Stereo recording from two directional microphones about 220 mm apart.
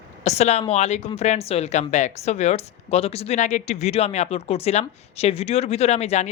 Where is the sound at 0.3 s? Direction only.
30° left (ahead or behind).